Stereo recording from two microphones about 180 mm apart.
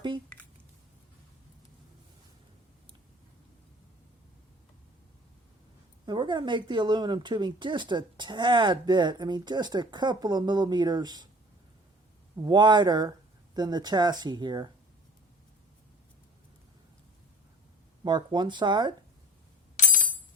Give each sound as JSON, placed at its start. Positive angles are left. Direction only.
{"t": 6.1, "sound": "speech", "side_deg": -25}
{"t": 12.4, "sound": "speech", "side_deg": -25}
{"t": 18.0, "sound": "speech", "side_deg": -25}